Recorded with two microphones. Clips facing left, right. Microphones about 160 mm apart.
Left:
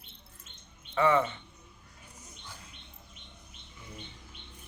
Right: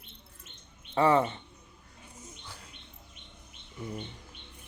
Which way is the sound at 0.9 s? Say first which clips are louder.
Right 2 dB; 35° right (ahead or behind).